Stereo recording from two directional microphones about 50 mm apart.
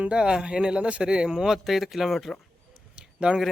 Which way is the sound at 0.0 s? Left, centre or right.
Centre.